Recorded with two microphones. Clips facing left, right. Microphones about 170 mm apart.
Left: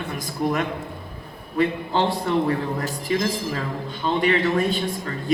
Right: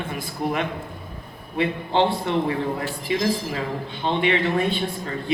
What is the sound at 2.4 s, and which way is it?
Speech, 40° left (ahead or behind).